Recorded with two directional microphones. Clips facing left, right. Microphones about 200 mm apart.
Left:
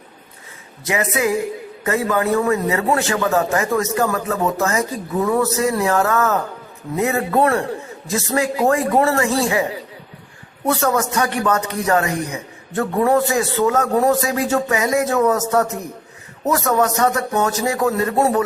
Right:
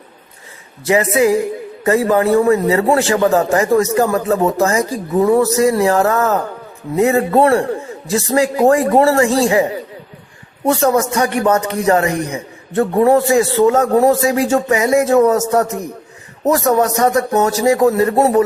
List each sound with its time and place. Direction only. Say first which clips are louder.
0.9 s speech: right 7 dB; 30° right (ahead or behind)
10.7 s a man's voice: right 5 dB; 30° right (ahead or behind)